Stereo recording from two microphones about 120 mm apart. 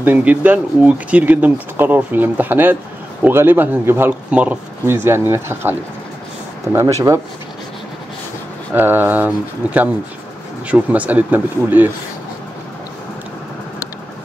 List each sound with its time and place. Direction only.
0.0 s speech: 15° right (ahead or behind)
8.7 s speech: 15° right (ahead or behind)